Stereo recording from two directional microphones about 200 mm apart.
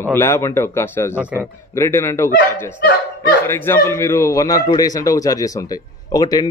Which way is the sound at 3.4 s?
10° left (ahead or behind).